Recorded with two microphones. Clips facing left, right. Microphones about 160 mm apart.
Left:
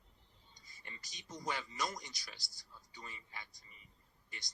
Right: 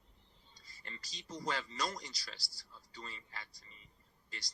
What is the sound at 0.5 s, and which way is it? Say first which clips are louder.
Speech: right 3 dB; 20° left (ahead or behind).